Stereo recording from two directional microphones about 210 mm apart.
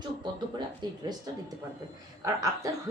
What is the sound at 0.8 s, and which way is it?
Speech, 20° right (ahead or behind).